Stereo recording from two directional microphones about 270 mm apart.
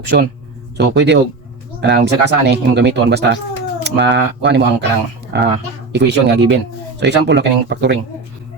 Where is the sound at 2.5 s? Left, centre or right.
Right.